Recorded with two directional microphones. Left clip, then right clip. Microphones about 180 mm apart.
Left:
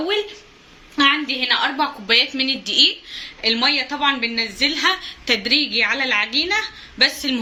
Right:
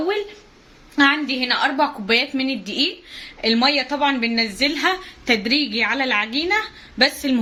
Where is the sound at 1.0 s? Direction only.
65° right (ahead or behind).